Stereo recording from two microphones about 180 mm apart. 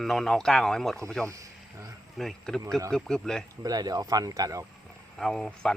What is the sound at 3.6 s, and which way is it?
Speech, 20° right (ahead or behind).